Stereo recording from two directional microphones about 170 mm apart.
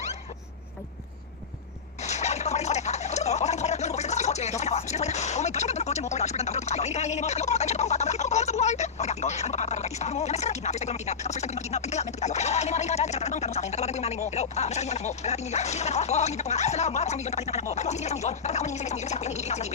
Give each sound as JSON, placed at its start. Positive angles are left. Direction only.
{"t": 2.0, "sound": "speech", "side_deg": 40}